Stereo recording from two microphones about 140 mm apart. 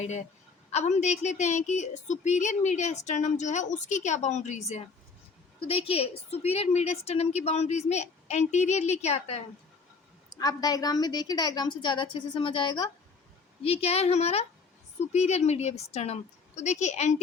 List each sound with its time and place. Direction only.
0.0 s a woman's voice: 55° left (ahead or behind)
5.5 s a woman's voice: 40° left (ahead or behind)
10.3 s a woman's voice: 25° left (ahead or behind)
13.6 s a woman's voice: 45° left (ahead or behind)